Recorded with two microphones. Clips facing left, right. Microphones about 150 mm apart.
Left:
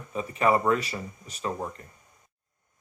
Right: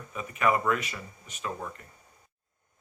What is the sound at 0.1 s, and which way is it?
Speech, 30° left (ahead or behind).